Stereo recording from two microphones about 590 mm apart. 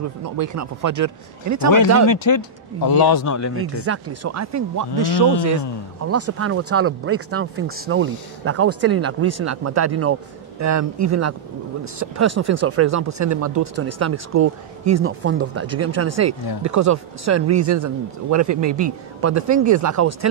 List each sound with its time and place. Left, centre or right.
0.2 s speech: right
2.0 s a man's voice: left
3.5 s speech: right